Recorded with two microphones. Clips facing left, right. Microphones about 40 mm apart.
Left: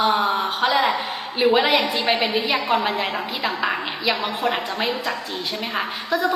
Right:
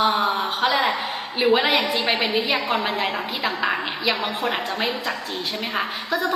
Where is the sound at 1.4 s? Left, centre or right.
Centre.